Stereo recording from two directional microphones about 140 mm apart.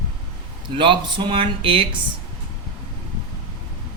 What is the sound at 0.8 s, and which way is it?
Speech, 35° right (ahead or behind).